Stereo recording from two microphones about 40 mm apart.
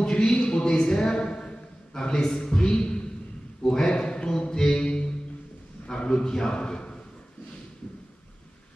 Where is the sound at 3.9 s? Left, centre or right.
Left.